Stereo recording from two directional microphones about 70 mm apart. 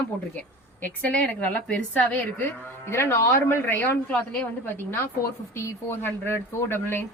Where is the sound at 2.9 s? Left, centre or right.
Left.